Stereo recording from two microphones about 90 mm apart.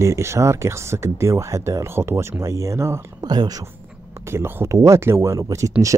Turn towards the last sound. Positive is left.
turn(degrees=-35)  # may be behind; listen again after turning